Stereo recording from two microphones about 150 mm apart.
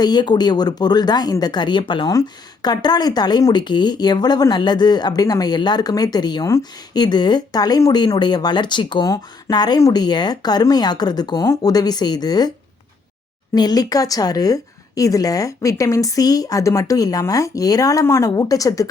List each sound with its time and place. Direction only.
0.0 s speech: 30° left (ahead or behind)